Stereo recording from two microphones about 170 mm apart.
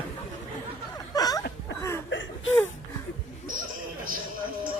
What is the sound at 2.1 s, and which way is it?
Whimper, 90° left.